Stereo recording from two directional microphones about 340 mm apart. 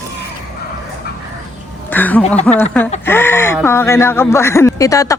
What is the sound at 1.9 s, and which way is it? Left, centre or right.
Speech, centre.